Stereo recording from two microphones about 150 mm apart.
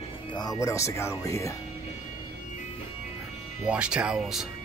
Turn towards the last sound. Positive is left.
turn(degrees=-5)  # may be behind; listen again after turning